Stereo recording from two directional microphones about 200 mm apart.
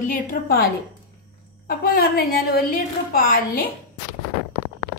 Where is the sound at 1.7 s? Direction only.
50° left (ahead or behind).